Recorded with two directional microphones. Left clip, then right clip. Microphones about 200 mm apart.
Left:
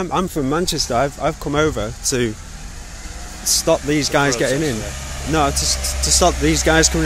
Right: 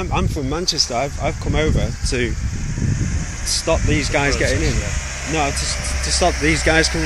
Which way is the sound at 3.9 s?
25° left (ahead or behind).